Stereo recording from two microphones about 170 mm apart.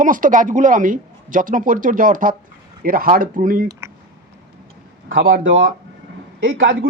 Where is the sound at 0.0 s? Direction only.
50° right (ahead or behind).